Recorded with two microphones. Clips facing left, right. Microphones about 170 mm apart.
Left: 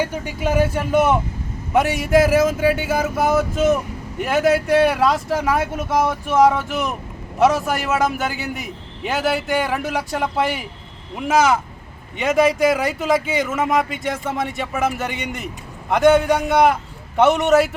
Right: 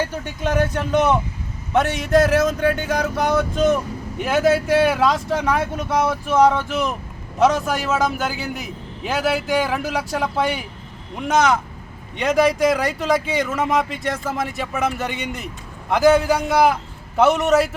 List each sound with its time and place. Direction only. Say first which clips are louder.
0.0 s speech: left 1 dB; 10° left (ahead or behind)